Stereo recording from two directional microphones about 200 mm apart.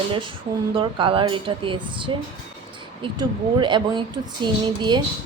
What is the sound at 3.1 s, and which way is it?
A woman's voice, 25° right (ahead or behind).